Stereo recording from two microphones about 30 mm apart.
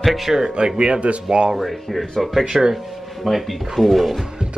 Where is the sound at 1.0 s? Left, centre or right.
Right.